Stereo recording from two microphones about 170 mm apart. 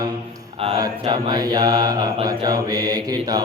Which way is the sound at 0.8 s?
25° right (ahead or behind).